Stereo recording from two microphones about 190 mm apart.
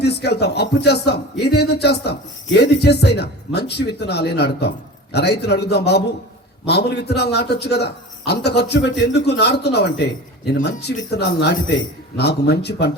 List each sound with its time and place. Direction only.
0.0 s a man's voice: 60° left (ahead or behind)